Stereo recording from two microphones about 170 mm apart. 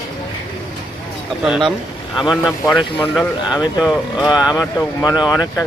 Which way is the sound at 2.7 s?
5° left (ahead or behind).